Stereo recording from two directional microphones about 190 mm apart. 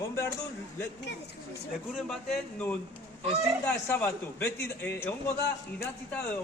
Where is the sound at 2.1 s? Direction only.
Centre (ahead or behind).